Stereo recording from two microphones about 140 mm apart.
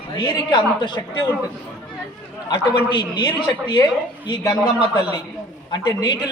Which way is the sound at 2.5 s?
30° left (ahead or behind).